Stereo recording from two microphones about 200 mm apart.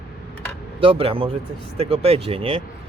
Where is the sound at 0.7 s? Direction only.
30° right (ahead or behind).